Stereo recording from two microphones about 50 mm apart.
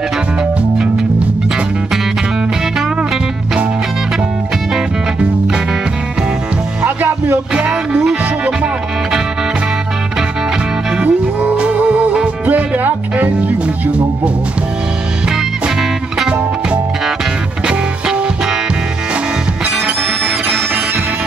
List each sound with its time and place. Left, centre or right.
7.5 s music: centre
11.0 s music: right
12.4 s music: right